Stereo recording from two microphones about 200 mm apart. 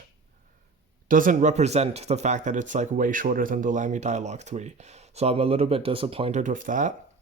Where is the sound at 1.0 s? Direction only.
45° right (ahead or behind).